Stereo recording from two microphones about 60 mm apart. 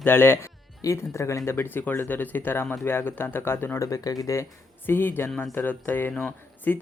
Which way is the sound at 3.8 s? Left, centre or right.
Left.